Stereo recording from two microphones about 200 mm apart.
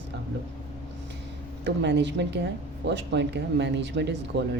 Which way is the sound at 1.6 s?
60° right (ahead or behind).